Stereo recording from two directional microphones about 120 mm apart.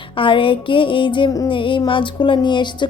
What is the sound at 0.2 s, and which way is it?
A woman's voice, 45° left (ahead or behind).